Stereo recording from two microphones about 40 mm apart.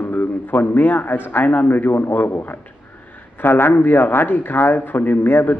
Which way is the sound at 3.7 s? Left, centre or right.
Left.